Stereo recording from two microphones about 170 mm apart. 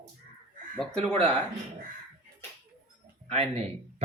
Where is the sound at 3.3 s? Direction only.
40° right (ahead or behind).